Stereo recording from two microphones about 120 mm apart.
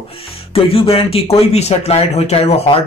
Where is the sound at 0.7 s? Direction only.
50° left (ahead or behind).